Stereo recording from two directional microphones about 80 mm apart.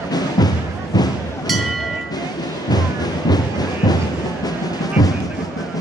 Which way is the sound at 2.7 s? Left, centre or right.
Left.